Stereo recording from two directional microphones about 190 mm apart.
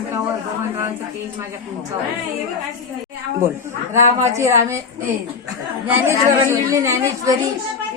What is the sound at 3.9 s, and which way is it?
Speech, 15° right (ahead or behind).